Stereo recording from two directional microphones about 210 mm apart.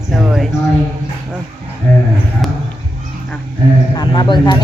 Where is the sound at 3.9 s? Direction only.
20° left (ahead or behind).